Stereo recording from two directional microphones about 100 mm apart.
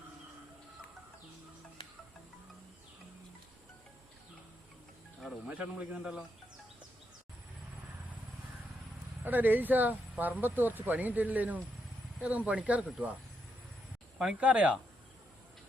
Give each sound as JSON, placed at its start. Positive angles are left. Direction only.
{"t": 5.5, "sound": "speech", "side_deg": -10}
{"t": 9.2, "sound": "speech", "side_deg": -20}
{"t": 14.2, "sound": "speech", "side_deg": -10}